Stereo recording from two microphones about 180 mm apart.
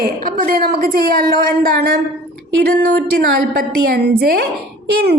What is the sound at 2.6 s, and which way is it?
A woman's voice, 60° right (ahead or behind).